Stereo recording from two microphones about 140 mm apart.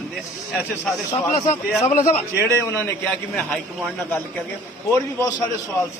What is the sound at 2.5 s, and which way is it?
Speech, 20° left (ahead or behind).